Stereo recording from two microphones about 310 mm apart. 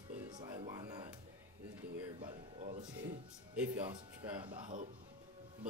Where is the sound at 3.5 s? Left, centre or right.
Centre.